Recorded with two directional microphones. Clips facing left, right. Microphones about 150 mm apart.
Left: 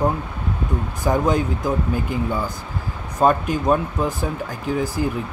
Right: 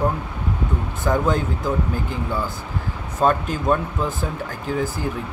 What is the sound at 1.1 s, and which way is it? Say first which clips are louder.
Speech: left 1 dB; 15° left (ahead or behind).